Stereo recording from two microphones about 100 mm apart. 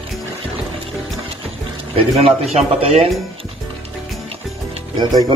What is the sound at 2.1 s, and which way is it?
Speech, 85° right.